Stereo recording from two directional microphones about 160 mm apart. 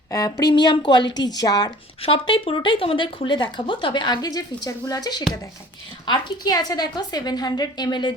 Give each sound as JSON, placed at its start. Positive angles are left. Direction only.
{"t": 0.1, "sound": "a woman's voice", "side_deg": 20}